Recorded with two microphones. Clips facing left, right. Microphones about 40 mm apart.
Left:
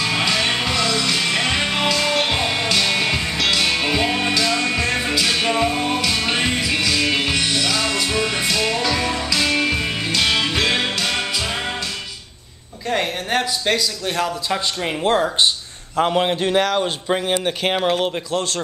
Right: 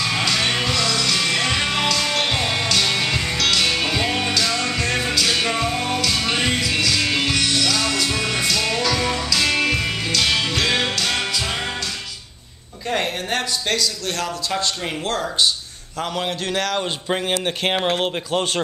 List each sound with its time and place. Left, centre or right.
0.0 s music: centre
12.9 s speech: centre
16.8 s speech: centre